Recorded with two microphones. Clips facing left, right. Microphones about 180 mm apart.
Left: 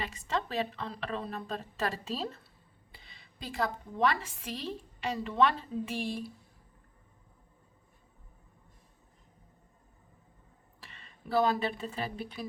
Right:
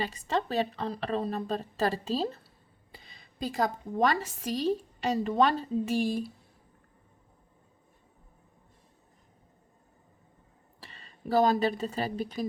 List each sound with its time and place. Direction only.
0.0 s a woman's voice: 35° right (ahead or behind)
2.9 s a woman's voice: 45° right (ahead or behind)
10.8 s a woman's voice: 35° right (ahead or behind)